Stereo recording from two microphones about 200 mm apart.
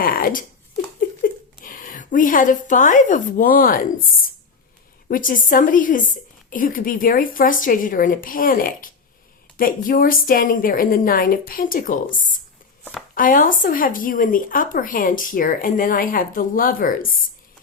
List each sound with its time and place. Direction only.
0.0 s a woman's voice: 45° left (ahead or behind)
5.0 s speech: 45° left (ahead or behind)